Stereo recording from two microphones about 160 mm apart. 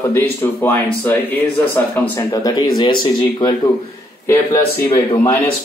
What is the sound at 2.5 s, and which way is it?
Speech, 25° left (ahead or behind).